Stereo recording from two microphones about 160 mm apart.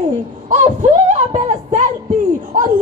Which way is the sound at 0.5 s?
45° right (ahead or behind).